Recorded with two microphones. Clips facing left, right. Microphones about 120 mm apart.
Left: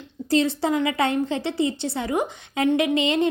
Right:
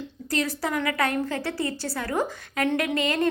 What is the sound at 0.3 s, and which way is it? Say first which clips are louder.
A woman's voice: left 6 dB; 25° left (ahead or behind).